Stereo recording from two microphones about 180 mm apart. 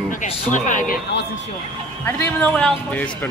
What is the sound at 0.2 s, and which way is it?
Speech, 45° left (ahead or behind).